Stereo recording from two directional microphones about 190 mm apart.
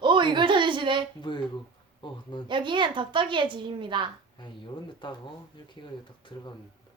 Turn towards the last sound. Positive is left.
turn(degrees=25)  # may be behind; listen again after turning